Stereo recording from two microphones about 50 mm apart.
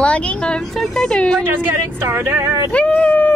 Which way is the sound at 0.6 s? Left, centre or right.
Centre.